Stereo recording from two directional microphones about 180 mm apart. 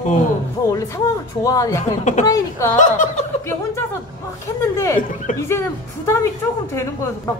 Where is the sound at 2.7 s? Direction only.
45° left (ahead or behind).